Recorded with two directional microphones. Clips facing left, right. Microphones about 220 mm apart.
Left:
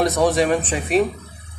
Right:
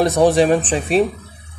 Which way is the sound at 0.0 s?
30° right (ahead or behind).